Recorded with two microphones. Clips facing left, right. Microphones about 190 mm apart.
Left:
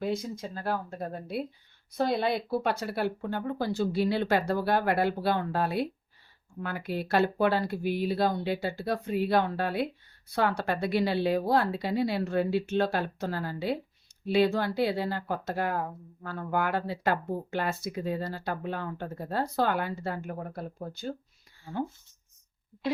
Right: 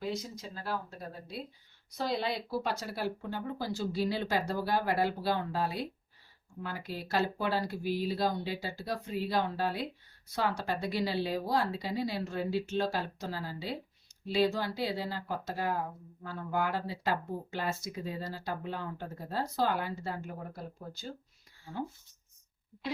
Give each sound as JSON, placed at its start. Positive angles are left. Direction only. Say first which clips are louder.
{"t": 0.0, "sound": "speech", "louder": "left 6 dB", "side_deg": 55}